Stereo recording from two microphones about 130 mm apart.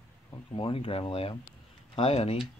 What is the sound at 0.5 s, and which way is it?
Speech, 40° left (ahead or behind).